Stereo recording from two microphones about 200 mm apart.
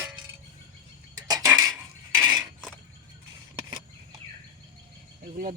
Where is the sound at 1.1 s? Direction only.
15° right (ahead or behind).